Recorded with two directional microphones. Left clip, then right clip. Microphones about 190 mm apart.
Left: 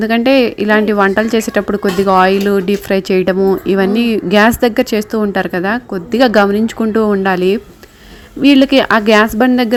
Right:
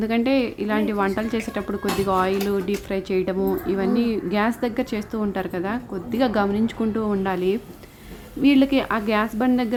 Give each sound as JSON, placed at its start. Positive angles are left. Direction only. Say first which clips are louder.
{"t": 0.0, "sound": "a woman's voice", "louder": "left 11 dB", "side_deg": 30}